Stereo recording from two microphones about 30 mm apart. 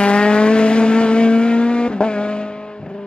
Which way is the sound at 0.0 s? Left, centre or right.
Left.